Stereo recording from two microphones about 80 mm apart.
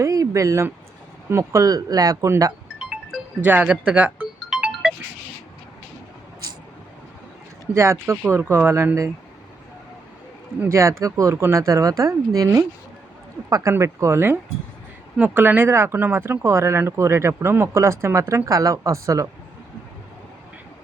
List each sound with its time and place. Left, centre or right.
0.0 s a sound: right
1.3 s speech: right
2.7 s music: centre
3.4 s music: centre
7.7 s speech: right
10.7 s speech: right
13.5 s speech: right